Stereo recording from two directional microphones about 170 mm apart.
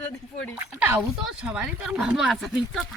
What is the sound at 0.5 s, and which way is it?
Speech, 10° right (ahead or behind).